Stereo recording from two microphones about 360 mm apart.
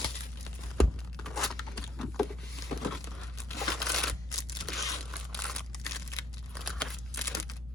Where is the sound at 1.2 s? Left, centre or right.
Centre.